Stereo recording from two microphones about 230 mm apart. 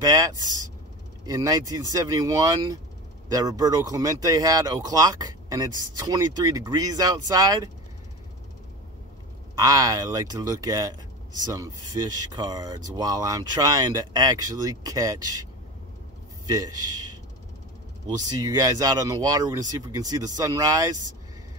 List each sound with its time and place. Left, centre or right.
0.0 s speech: centre
9.6 s speech: centre
16.4 s a man's voice: centre
18.1 s speech: centre